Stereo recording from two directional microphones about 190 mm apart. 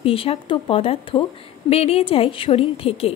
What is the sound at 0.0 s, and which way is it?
A woman's voice, 30° left (ahead or behind).